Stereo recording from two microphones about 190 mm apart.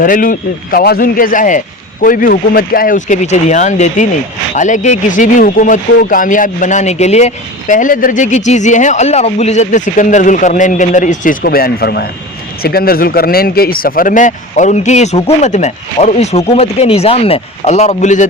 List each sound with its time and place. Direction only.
0.0 s speech: 45° left (ahead or behind)